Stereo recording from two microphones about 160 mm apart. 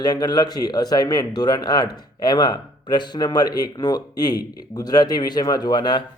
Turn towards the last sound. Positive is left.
turn(degrees=25)  # may be behind; listen again after turning